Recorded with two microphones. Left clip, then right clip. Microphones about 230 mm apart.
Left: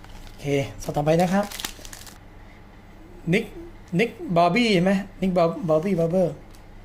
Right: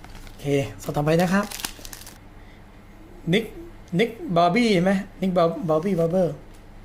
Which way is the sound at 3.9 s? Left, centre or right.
Centre.